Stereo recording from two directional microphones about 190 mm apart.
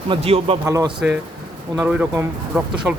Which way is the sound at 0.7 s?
15° right (ahead or behind).